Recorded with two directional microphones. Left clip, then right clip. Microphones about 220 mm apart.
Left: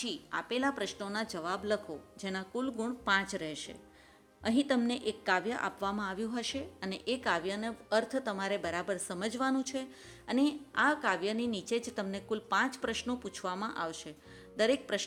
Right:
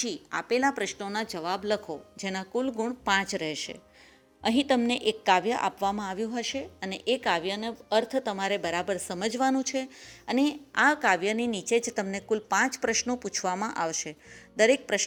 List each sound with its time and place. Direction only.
0.0 s a woman's voice: 25° right (ahead or behind)